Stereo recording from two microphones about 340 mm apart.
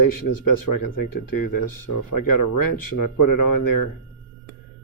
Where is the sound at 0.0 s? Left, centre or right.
Left.